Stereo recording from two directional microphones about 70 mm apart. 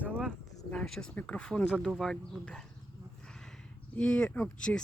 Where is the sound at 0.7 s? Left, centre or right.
Centre.